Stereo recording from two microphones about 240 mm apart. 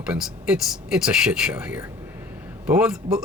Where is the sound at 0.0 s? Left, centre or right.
Centre.